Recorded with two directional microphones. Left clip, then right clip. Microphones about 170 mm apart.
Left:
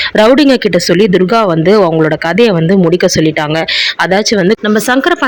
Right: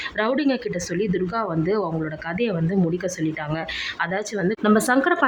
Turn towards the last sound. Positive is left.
turn(degrees=30)  # may be behind; listen again after turning